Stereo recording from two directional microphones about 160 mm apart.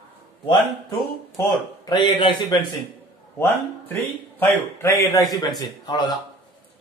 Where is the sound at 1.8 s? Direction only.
30° left (ahead or behind).